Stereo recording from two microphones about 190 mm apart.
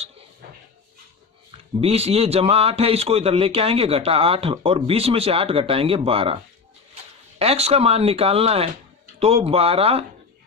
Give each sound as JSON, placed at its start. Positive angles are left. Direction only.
{"t": 1.8, "sound": "a man's voice", "side_deg": -30}
{"t": 7.3, "sound": "a man's voice", "side_deg": -30}